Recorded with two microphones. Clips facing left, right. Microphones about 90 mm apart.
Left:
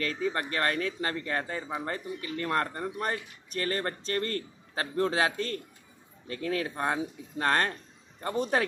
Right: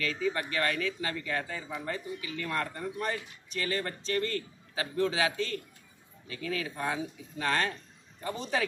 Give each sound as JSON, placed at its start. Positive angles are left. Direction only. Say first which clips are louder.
{"t": 0.0, "sound": "speech", "louder": "left 1 dB", "side_deg": 40}